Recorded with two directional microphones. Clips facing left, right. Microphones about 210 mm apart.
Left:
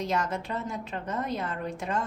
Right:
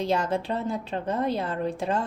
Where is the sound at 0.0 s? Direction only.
30° right (ahead or behind).